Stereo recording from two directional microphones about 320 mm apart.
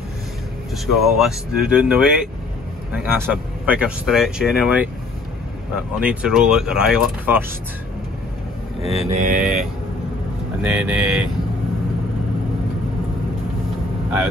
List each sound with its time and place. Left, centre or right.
0.9 s speech: centre
9.0 s mantra: right
10.6 s speech: centre